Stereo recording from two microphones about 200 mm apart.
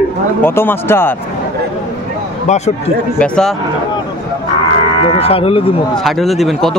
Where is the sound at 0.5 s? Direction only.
10° left (ahead or behind).